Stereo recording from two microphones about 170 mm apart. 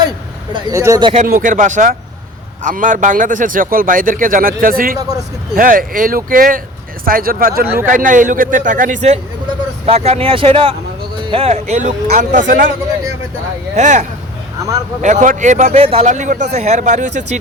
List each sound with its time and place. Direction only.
0.5 s speech: 20° right (ahead or behind)
1.0 s speech: 40° right (ahead or behind)
1.3 s speech: 50° right (ahead or behind)
4.9 s speech: 20° right (ahead or behind)
5.5 s speech: 55° right (ahead or behind)
13.7 s speech: 45° right (ahead or behind)
15.0 s speech: 45° right (ahead or behind)